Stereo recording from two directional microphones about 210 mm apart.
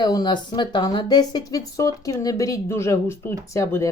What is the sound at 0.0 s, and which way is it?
Speech, 20° left (ahead or behind).